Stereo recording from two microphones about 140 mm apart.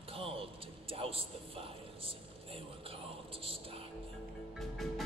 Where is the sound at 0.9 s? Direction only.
40° right (ahead or behind).